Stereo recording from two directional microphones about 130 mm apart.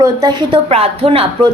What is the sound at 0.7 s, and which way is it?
Speech, 50° right (ahead or behind).